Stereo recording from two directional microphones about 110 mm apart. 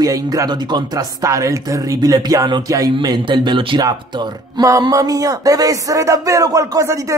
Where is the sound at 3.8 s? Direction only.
35° right (ahead or behind).